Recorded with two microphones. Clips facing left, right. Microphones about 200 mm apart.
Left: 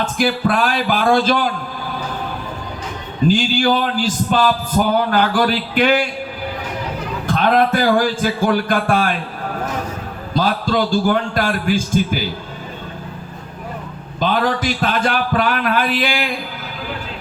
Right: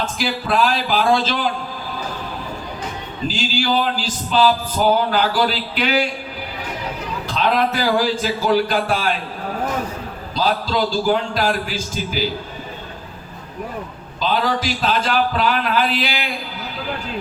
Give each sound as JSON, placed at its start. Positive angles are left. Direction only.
{"t": 0.2, "sound": "a man's voice", "side_deg": 50}
{"t": 3.2, "sound": "a man's voice", "side_deg": 55}
{"t": 7.3, "sound": "a man's voice", "side_deg": 50}
{"t": 10.3, "sound": "a man's voice", "side_deg": 55}
{"t": 14.2, "sound": "a man's voice", "side_deg": 55}